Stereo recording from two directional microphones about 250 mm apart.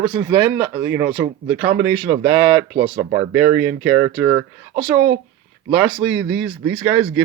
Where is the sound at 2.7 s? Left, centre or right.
Right.